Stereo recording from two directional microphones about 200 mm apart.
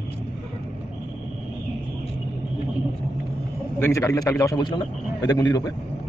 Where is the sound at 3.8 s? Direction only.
15° left (ahead or behind).